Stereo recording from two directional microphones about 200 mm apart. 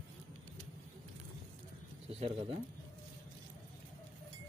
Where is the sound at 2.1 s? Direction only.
30° right (ahead or behind).